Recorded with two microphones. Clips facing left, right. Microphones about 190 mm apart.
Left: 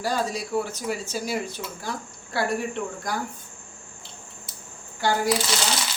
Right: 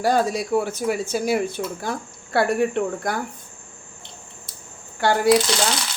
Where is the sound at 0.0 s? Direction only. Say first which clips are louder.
Right 6 dB; 55° right (ahead or behind).